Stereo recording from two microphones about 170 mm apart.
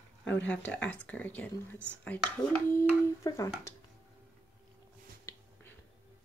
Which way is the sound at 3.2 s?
20° left (ahead or behind).